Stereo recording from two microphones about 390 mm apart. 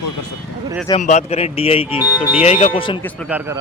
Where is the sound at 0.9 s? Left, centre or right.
Centre.